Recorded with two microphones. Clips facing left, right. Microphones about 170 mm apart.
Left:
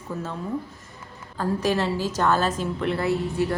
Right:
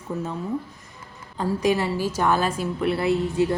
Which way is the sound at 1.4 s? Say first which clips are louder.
Right 1 dB; 15° right (ahead or behind).